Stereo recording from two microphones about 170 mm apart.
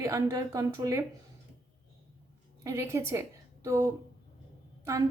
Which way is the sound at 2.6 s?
20° right (ahead or behind).